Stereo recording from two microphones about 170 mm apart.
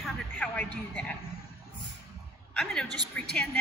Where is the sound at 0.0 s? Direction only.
5° left (ahead or behind).